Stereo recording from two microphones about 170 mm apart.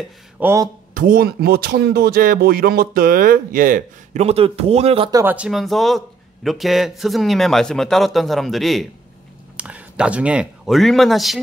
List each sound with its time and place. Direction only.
0.4 s speech: 15° right (ahead or behind)
0.9 s speech: 60° right (ahead or behind); by 5.1 s 35° right (ahead or behind)
5.1 s a man's voice: 10° right (ahead or behind)